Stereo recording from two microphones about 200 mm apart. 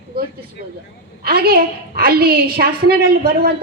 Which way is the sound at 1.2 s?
50° right (ahead or behind).